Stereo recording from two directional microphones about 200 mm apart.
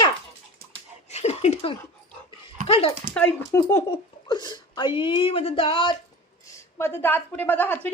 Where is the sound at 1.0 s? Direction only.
35° left (ahead or behind).